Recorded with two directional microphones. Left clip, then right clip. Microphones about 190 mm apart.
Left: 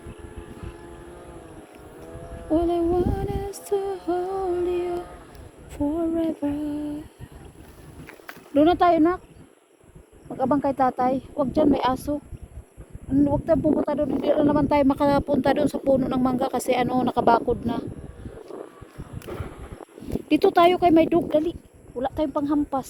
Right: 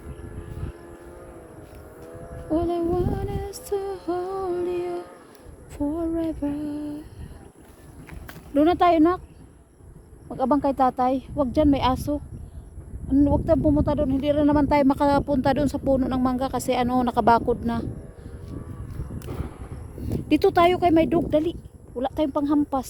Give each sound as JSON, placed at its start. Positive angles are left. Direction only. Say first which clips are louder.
{"t": 2.5, "sound": "female singing", "louder": "left 2 dB", "side_deg": 0}
{"t": 3.6, "sound": "music", "louder": "left 2 dB", "side_deg": 0}
{"t": 4.3, "sound": "music", "louder": "left 2 dB", "side_deg": 20}
{"t": 4.5, "sound": "female singing", "louder": "left 2 dB", "side_deg": 0}
{"t": 5.7, "sound": "speech", "louder": "left 2 dB", "side_deg": 0}
{"t": 8.5, "sound": "speech", "louder": "even", "side_deg": -15}
{"t": 10.2, "sound": "speech", "louder": "right 1 dB", "side_deg": -20}
{"t": 19.3, "sound": "a sound", "louder": "left 2 dB", "side_deg": -55}
{"t": 20.1, "sound": "speech", "louder": "even", "side_deg": -20}
{"t": 21.2, "sound": "speech", "louder": "even", "side_deg": -20}
{"t": 21.9, "sound": "speech", "louder": "right 1 dB", "side_deg": -30}